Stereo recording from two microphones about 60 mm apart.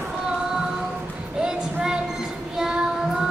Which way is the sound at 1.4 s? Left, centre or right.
Centre.